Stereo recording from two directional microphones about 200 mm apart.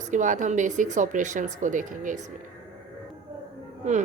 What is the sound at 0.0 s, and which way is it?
Speech, 40° right (ahead or behind).